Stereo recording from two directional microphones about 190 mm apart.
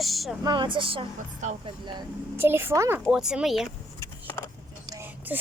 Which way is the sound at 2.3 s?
10° right (ahead or behind).